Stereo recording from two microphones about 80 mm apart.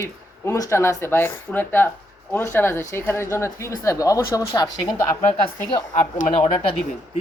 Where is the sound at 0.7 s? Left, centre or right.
Left.